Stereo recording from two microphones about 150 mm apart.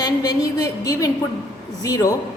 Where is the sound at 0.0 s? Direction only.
25° left (ahead or behind).